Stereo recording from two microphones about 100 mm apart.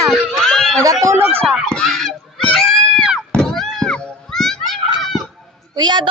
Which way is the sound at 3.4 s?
5° left (ahead or behind).